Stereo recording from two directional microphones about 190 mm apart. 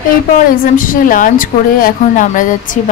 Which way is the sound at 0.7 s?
45° left (ahead or behind).